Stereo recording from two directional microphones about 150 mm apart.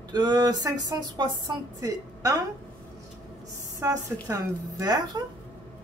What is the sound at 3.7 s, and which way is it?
Speech, 20° right (ahead or behind).